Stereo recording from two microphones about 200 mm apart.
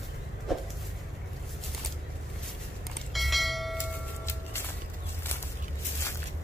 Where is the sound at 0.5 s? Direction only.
Centre (ahead or behind).